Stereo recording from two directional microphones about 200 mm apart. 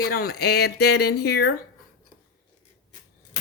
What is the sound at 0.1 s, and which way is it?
Speech, 50° left (ahead or behind).